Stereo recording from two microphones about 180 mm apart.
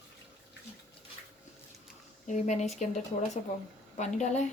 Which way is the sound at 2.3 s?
40° left (ahead or behind).